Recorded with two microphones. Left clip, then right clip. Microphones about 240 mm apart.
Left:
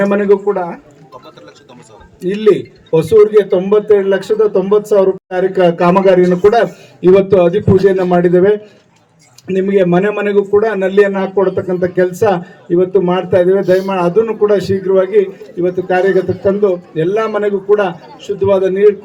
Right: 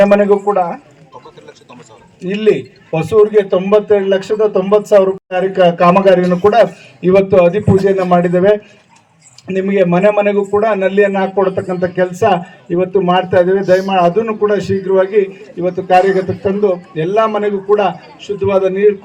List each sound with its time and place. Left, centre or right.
0.0 s a man's voice: centre
2.2 s a man's voice: centre